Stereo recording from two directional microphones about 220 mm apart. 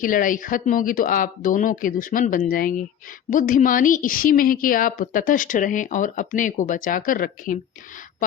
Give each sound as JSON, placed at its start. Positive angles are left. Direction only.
{"t": 0.0, "sound": "a woman's voice", "side_deg": 40}